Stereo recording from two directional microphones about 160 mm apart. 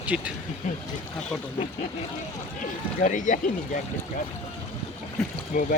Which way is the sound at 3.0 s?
50° left (ahead or behind).